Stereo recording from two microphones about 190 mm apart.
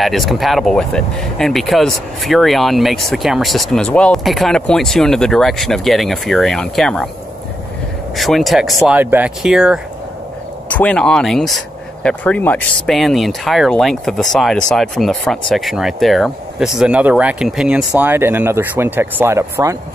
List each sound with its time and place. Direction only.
0.0 s speech: centre (ahead or behind)
8.2 s speech: centre (ahead or behind); by 19.8 s 15° right (ahead or behind)